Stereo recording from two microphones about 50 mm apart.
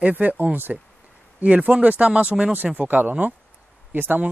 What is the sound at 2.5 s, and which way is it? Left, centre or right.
Speech, right.